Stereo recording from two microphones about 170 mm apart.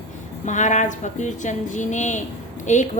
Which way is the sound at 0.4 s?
45° left (ahead or behind).